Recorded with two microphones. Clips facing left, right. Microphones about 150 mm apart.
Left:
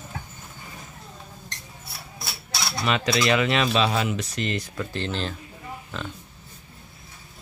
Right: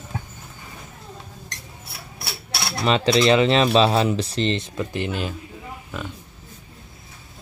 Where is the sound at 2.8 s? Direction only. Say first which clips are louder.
Right 6 dB; 30° right (ahead or behind); by 6.1 s 5° right (ahead or behind).